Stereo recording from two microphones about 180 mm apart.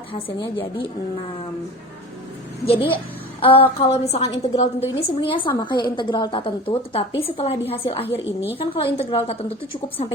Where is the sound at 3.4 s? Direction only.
30° left (ahead or behind).